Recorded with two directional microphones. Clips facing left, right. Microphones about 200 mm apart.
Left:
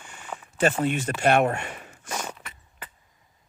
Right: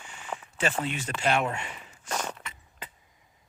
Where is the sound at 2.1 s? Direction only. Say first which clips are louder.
Even; 5° left (ahead or behind).